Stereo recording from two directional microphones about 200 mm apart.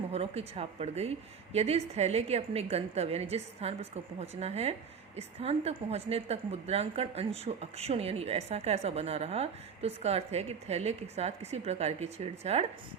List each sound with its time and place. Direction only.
0.1 s a woman's voice: 30° right (ahead or behind)